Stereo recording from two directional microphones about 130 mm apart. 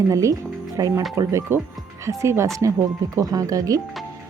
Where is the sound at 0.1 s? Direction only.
25° right (ahead or behind).